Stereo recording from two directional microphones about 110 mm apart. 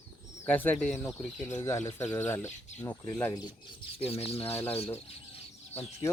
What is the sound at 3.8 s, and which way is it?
Speech, 65° left (ahead or behind).